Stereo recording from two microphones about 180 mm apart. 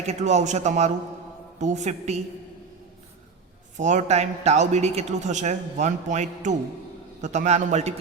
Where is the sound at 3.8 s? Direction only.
40° right (ahead or behind).